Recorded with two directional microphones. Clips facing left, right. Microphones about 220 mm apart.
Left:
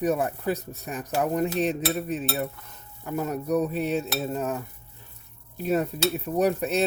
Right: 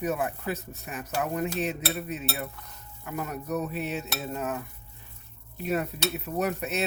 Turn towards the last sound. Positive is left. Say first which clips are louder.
# left 5 dB
turn(degrees=35)  # may be behind; listen again after turning